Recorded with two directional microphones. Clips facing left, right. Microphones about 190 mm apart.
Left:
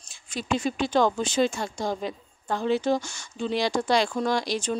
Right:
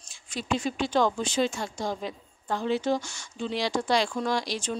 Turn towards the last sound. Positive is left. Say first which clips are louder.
# left 3 dB
turn(degrees=50)  # may be behind; listen again after turning